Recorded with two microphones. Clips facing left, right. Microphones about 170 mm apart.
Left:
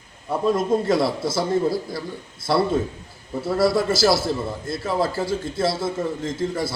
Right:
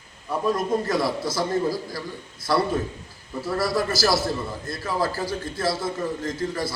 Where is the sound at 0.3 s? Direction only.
25° left (ahead or behind).